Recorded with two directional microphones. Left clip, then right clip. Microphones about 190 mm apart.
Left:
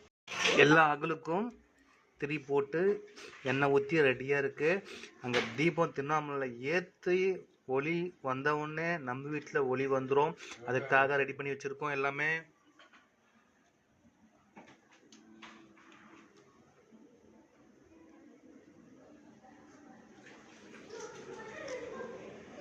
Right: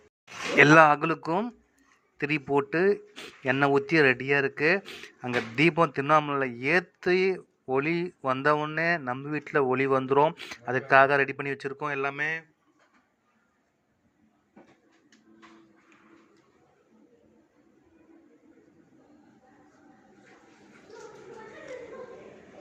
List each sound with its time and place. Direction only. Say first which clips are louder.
0.5 s speech: right 8 dB; 25° right (ahead or behind)